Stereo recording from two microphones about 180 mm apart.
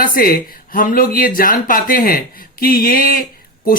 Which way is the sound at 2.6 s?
55° left (ahead or behind).